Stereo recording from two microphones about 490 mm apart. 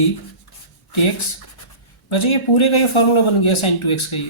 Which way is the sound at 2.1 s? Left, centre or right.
Left.